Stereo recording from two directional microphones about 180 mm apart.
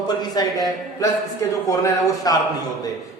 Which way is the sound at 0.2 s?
20° left (ahead or behind).